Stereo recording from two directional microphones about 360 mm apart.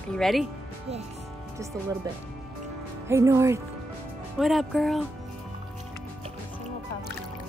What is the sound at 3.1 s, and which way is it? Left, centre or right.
Speech, centre.